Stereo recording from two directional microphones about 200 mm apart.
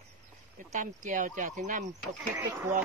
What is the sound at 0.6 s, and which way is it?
Speech, 40° right (ahead or behind).